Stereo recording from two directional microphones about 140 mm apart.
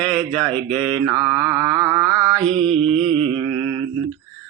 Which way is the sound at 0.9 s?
25° right (ahead or behind).